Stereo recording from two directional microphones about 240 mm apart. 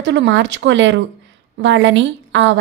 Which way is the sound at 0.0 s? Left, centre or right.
Right.